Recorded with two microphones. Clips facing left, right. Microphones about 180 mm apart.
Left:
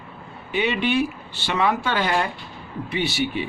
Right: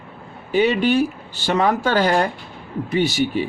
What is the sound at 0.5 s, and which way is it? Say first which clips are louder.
Speech: right 5 dB; 40° right (ahead or behind).